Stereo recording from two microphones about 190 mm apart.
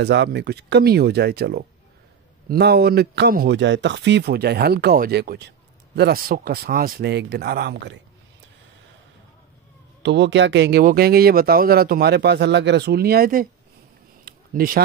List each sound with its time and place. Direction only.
0.0 s speech: 65° right (ahead or behind)
10.0 s speech: 70° right (ahead or behind); by 13.5 s 50° right (ahead or behind)
14.2 s a sound: 50° right (ahead or behind)